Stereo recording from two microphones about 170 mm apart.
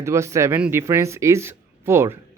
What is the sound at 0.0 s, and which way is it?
Speech, 15° right (ahead or behind).